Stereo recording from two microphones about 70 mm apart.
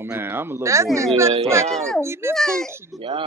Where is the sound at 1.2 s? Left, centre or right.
Right.